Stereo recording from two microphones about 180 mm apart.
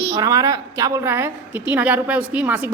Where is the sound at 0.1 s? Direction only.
20° right (ahead or behind).